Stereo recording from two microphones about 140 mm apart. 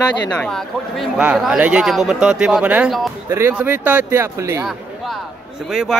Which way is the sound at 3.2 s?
20° right (ahead or behind).